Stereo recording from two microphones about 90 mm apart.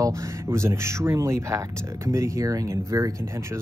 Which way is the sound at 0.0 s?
35° right (ahead or behind).